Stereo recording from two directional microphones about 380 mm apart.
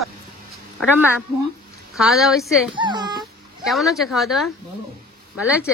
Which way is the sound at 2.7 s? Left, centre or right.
Centre.